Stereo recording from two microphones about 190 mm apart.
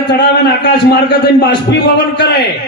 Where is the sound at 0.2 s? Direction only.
60° left (ahead or behind).